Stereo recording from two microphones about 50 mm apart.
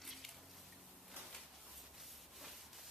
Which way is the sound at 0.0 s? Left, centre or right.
Centre.